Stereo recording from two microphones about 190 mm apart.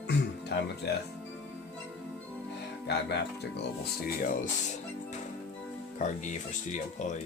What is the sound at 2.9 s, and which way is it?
Speech, 60° left (ahead or behind).